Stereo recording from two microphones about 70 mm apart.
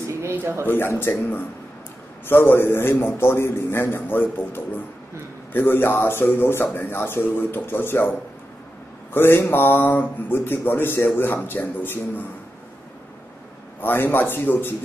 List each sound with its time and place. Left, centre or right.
0.0 s a sound: right
0.7 s a man's voice: left
9.1 s a man's voice: left
13.7 s a man's voice: left